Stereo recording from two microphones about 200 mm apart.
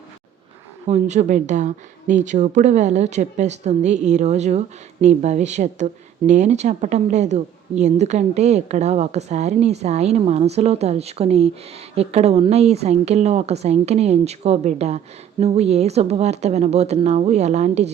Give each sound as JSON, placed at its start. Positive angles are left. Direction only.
{"t": 0.9, "sound": "speech", "side_deg": -35}